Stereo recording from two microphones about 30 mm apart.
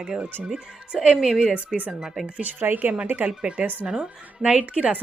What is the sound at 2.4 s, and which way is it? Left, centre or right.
Speech, right.